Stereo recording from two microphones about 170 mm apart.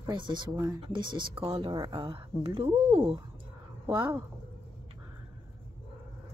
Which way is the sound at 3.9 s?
10° right (ahead or behind).